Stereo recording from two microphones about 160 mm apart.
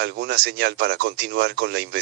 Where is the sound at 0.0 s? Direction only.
90° right.